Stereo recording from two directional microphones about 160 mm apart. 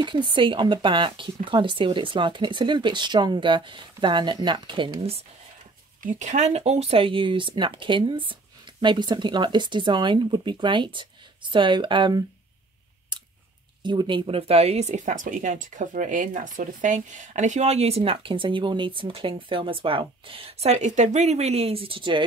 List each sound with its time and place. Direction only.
0.0 s speech: 30° right (ahead or behind)
6.0 s speech: 50° right (ahead or behind); by 12.3 s 25° right (ahead or behind)
13.1 s a sound: 30° right (ahead or behind)
13.8 s speech: 30° right (ahead or behind)